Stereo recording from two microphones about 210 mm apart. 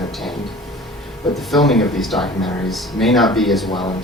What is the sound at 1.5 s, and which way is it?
Speech, centre (ahead or behind).